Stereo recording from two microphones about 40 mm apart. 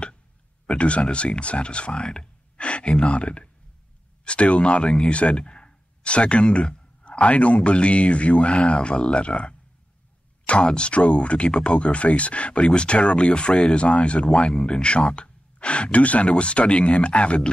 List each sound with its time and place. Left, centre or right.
0.7 s speech: left